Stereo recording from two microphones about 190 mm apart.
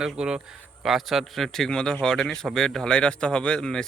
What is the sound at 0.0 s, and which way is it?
A man's voice, 5° right (ahead or behind).